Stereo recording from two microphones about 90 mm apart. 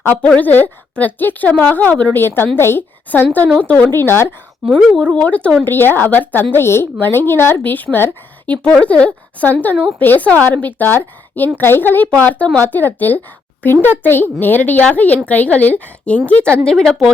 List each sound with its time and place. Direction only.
0.2 s speech: 15° left (ahead or behind)
5.1 s a woman's voice: 15° left (ahead or behind)
16.6 s speech: 5° left (ahead or behind)